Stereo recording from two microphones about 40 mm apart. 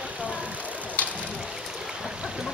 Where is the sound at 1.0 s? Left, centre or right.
Left.